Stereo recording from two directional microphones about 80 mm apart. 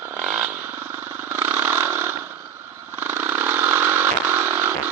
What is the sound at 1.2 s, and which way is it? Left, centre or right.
Vehicle, right.